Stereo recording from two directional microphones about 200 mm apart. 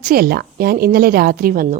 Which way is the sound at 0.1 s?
50° right (ahead or behind).